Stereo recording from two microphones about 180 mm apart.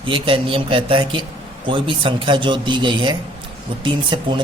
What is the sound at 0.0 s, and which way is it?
Speech, 30° right (ahead or behind).